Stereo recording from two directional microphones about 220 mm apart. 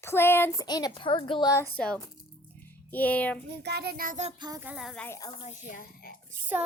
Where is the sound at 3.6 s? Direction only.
45° right (ahead or behind).